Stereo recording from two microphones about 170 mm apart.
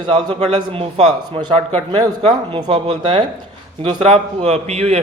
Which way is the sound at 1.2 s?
25° right (ahead or behind).